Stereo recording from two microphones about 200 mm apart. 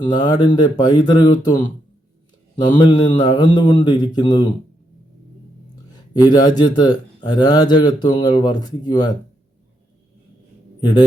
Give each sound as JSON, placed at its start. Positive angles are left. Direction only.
{"t": 0.0, "sound": "a man's voice", "side_deg": 20}
{"t": 2.6, "sound": "a man's voice", "side_deg": 20}
{"t": 6.1, "sound": "a man's voice", "side_deg": 20}
{"t": 10.8, "sound": "a man's voice", "side_deg": 20}